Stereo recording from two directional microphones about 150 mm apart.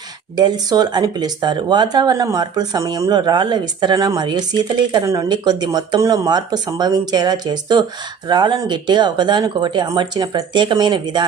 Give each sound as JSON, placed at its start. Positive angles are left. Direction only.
{"t": 0.3, "sound": "speech", "side_deg": -30}